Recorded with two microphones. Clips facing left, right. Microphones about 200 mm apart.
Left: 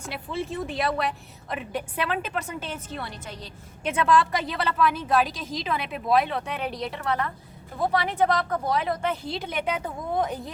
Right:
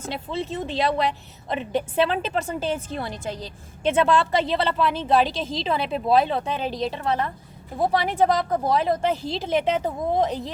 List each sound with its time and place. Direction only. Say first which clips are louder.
0.0 s a woman's voice: right 3 dB; 25° right (ahead or behind)